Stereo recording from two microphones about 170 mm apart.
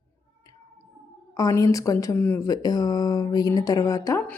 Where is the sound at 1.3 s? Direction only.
20° left (ahead or behind).